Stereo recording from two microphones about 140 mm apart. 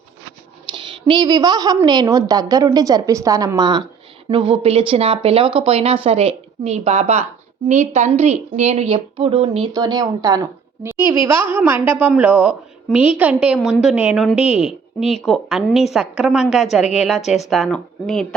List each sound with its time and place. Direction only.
0.7 s a woman's voice: 35° right (ahead or behind)
9.7 s a woman's voice: 25° right (ahead or behind); by 14.3 s 5° right (ahead or behind)
14.3 s a woman's voice: 45° left (ahead or behind)
14.6 s a woman's voice: centre (ahead or behind)